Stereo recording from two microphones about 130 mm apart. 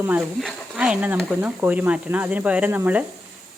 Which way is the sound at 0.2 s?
Centre (ahead or behind).